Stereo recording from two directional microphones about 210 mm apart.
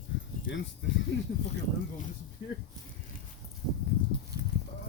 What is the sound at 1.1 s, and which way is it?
Speech, 60° left (ahead or behind).